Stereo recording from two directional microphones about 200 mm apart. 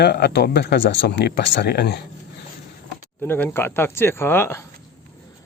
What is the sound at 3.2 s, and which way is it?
Speech, 10° left (ahead or behind).